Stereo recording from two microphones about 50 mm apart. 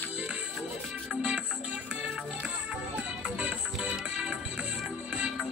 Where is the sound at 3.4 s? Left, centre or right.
Right.